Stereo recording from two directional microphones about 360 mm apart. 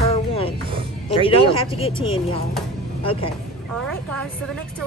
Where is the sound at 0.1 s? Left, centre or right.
Centre.